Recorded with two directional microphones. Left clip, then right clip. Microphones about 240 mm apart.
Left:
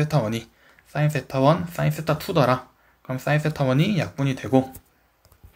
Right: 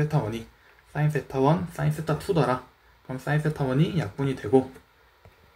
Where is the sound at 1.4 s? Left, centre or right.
Left.